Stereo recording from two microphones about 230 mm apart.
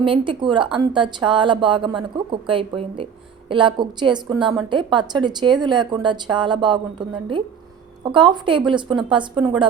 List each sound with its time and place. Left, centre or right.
0.0 s a woman's voice: right